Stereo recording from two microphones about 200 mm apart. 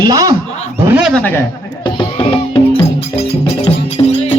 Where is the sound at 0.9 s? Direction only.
5° right (ahead or behind).